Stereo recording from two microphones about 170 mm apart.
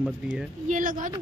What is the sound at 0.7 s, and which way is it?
Speech, 50° right (ahead or behind).